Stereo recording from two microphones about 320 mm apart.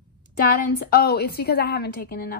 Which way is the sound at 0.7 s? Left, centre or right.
Left.